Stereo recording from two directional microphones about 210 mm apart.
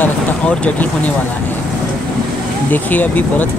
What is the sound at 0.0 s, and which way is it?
Vehicle, 5° left (ahead or behind).